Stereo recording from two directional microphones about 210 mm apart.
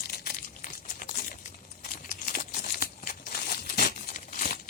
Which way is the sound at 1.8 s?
35° left (ahead or behind).